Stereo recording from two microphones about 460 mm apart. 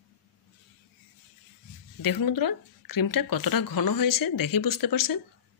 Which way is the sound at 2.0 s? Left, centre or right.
Left.